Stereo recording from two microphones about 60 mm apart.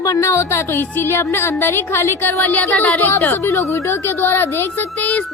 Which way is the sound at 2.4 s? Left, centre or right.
Left.